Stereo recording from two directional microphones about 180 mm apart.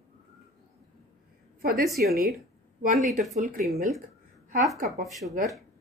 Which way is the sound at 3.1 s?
40° right (ahead or behind).